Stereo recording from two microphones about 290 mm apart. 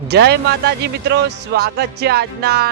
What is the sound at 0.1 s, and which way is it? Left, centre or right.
Music, right.